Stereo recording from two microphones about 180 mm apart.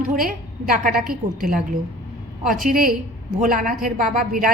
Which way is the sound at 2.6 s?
55° right (ahead or behind).